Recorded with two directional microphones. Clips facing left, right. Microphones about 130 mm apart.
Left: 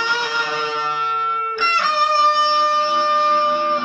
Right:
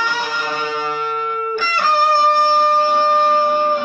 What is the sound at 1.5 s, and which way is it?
Music, 40° right (ahead or behind).